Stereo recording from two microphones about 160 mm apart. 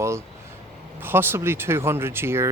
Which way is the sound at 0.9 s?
15° right (ahead or behind).